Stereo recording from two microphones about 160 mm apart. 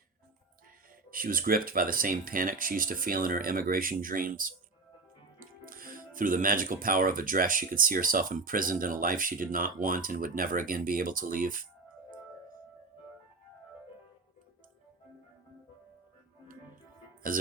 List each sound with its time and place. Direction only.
1.1 s speech: 60° right (ahead or behind)
17.2 s music: 60° right (ahead or behind)